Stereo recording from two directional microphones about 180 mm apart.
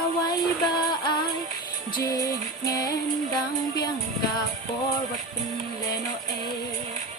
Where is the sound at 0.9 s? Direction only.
25° left (ahead or behind).